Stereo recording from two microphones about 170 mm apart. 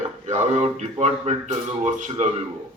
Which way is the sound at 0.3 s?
40° right (ahead or behind).